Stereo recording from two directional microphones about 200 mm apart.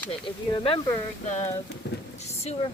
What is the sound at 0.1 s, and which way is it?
Speech, 25° left (ahead or behind).